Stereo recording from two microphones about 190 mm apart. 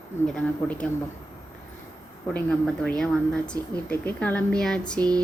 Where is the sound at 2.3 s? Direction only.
5° left (ahead or behind).